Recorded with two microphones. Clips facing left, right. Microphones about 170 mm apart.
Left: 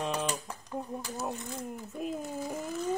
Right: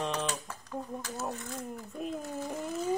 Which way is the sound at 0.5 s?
20° left (ahead or behind).